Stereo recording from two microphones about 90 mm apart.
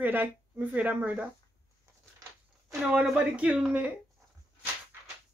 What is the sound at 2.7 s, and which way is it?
A woman's voice, 10° right (ahead or behind).